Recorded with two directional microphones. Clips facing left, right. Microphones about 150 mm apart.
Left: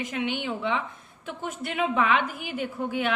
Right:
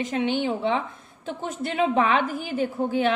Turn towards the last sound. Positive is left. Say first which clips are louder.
# right 5 dB
turn(degrees=-35)  # may be behind; listen again after turning